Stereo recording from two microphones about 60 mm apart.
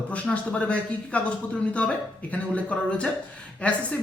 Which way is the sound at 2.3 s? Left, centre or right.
Left.